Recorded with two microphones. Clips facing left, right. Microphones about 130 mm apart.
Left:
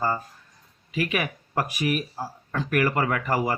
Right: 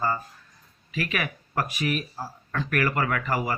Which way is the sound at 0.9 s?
25° left (ahead or behind).